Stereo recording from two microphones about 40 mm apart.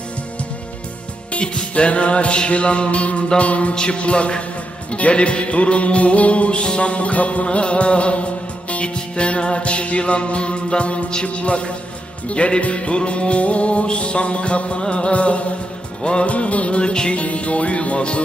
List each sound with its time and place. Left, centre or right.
1.3 s music: left
7.4 s music: left